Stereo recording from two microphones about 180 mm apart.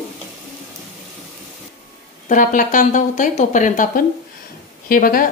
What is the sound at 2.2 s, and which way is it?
Speech, 45° left (ahead or behind).